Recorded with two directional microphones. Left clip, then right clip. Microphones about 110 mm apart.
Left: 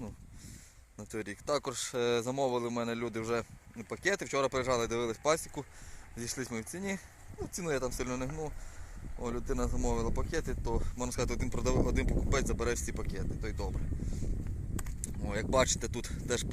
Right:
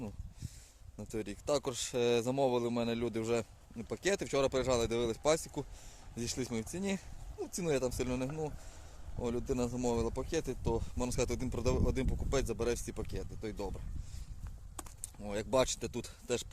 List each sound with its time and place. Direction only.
0.9 s speech: 20° right (ahead or behind)
6.1 s speech: 40° right (ahead or behind)
14.8 s a sound: 25° right (ahead or behind)
15.8 s speech: centre (ahead or behind)